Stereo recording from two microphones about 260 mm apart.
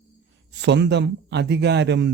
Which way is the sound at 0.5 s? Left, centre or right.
Right.